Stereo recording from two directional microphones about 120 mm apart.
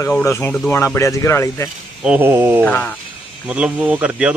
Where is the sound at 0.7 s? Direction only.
25° left (ahead or behind).